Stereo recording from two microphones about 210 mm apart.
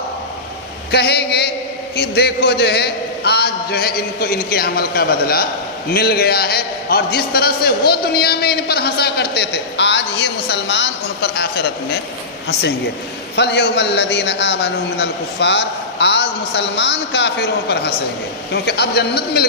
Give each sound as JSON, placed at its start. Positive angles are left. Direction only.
{"t": 0.9, "sound": "a man's voice", "side_deg": 50}
{"t": 13.3, "sound": "a man's voice", "side_deg": 50}